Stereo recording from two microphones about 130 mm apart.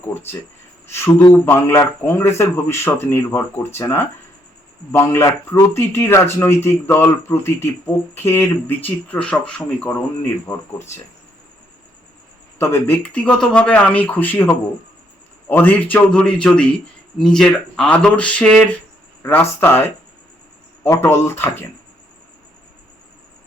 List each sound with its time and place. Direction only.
0.1 s a man's voice: 15° left (ahead or behind)
12.5 s speech: 20° left (ahead or behind)
13.0 s a man's voice: 10° left (ahead or behind)